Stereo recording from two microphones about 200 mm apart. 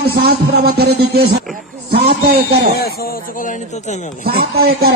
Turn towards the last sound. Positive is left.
turn(degrees=-50)  # may be behind; listen again after turning